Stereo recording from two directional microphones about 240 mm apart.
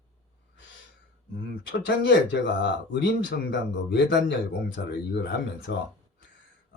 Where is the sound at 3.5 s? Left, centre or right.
Left.